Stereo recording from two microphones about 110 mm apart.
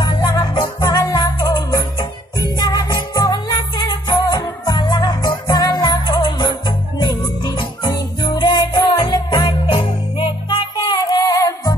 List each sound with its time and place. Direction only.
0.0 s music: 40° left (ahead or behind)
10.5 s music: 40° left (ahead or behind)